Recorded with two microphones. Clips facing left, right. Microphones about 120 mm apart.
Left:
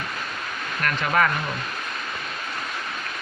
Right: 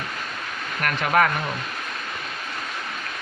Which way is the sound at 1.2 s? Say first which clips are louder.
Right 2 dB; 60° right (ahead or behind).